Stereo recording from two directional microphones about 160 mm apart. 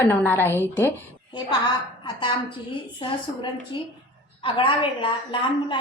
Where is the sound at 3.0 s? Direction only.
30° left (ahead or behind).